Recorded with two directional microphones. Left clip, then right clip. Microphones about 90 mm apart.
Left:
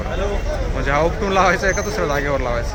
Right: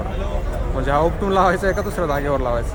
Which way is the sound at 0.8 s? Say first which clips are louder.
Even; 15° right (ahead or behind).